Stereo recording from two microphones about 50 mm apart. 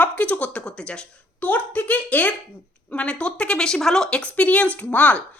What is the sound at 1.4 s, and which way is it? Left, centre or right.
A woman's voice, left.